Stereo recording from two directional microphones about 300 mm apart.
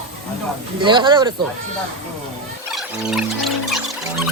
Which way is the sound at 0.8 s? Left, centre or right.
Centre.